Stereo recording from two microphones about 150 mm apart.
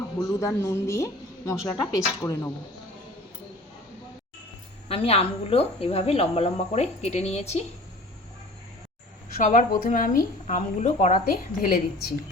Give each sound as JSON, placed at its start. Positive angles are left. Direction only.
{"t": 0.2, "sound": "a woman's voice", "side_deg": 20}
{"t": 4.9, "sound": "a woman's voice", "side_deg": 40}
{"t": 9.4, "sound": "a woman's voice", "side_deg": 60}
{"t": 10.4, "sound": "a woman's voice", "side_deg": 55}